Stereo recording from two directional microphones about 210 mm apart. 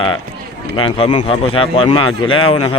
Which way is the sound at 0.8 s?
25° left (ahead or behind).